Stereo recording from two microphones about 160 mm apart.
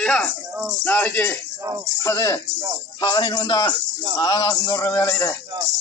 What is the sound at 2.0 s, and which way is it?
A man's voice, 20° left (ahead or behind).